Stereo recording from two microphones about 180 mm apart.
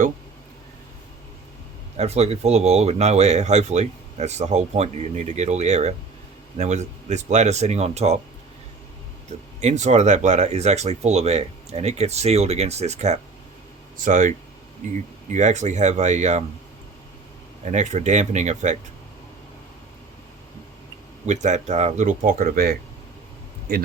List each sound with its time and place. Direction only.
2.0 s speech: 35° right (ahead or behind)
9.6 s speech: 40° right (ahead or behind)
17.7 s speech: 40° right (ahead or behind)
21.2 s speech: 40° right (ahead or behind)